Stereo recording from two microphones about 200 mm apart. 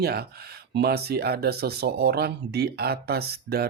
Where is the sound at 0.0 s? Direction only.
50° right (ahead or behind).